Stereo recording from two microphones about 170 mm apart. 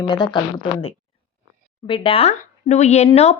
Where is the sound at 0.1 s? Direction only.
25° left (ahead or behind).